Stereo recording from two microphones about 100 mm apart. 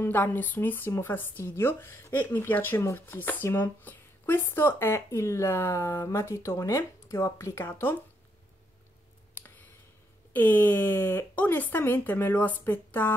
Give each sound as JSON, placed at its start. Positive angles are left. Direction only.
{"t": 0.0, "sound": "speech", "side_deg": 20}
{"t": 10.3, "sound": "speech", "side_deg": 20}